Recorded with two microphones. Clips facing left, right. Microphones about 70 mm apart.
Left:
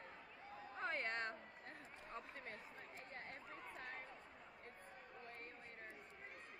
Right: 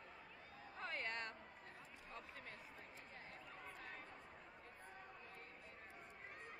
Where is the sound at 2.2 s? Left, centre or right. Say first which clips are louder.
Left 3 dB; left.